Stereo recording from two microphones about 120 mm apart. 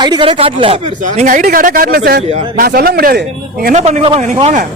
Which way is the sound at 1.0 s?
90° right.